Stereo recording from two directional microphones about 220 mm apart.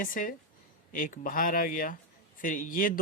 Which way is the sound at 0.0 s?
40° left (ahead or behind).